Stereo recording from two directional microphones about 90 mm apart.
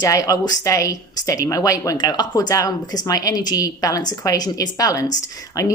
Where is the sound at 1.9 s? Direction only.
50° left (ahead or behind).